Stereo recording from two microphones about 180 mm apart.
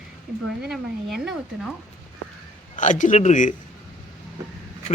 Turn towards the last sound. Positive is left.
turn(degrees=45)  # may be behind; listen again after turning